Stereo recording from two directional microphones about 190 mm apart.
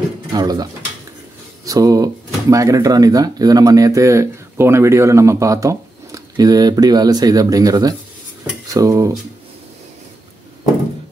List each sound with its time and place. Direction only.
0.3 s speech: 20° right (ahead or behind)